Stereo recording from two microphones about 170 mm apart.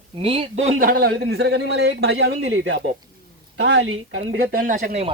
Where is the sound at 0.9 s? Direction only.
60° right (ahead or behind); by 2.8 s 80° right.